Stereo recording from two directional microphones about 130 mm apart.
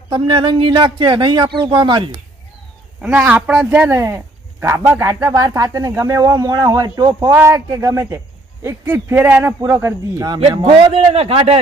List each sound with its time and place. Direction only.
0.1 s speech: 35° right (ahead or behind)
3.0 s a man's voice: 10° right (ahead or behind)
10.4 s a man's voice: 40° right (ahead or behind)